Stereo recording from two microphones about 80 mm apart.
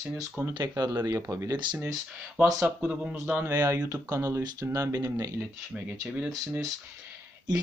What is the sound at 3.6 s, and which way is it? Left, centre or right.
Speech, right.